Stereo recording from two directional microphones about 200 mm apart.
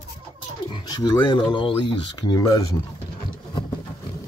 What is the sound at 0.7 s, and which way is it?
Speech, 20° left (ahead or behind).